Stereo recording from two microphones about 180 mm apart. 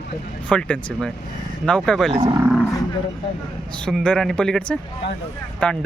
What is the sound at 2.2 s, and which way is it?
Speech, 20° right (ahead or behind).